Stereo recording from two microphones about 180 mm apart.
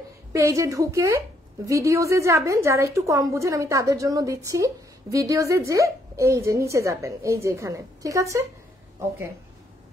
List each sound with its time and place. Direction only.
0.3 s a woman's voice: 15° right (ahead or behind)